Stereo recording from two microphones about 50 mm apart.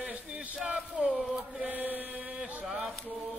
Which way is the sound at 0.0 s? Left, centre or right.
Right.